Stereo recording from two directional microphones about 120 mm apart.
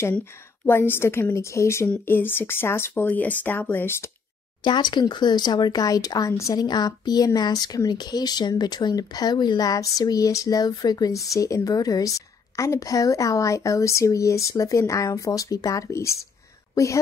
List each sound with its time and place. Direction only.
0.1 s a woman's voice: 20° left (ahead or behind)
4.6 s a woman's voice: 40° left (ahead or behind)